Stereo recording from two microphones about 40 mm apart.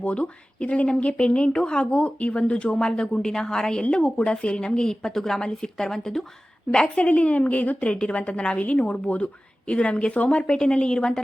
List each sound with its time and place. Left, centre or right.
0.0 s a woman's voice: left; by 6.2 s centre
6.9 s speech: left
7.9 s speech: left